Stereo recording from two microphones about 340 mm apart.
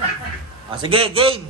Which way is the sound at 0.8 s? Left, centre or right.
Centre.